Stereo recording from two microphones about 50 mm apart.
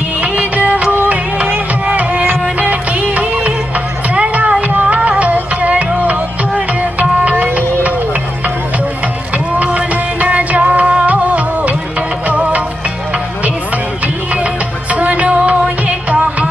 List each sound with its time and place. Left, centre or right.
0.2 s music: right
9.6 s music: right
14.0 s music: right